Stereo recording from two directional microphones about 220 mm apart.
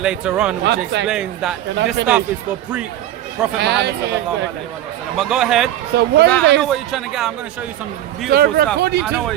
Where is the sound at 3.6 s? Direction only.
50° right (ahead or behind).